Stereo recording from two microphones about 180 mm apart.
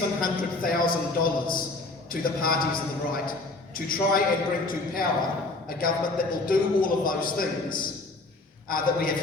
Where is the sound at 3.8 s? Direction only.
50° left (ahead or behind).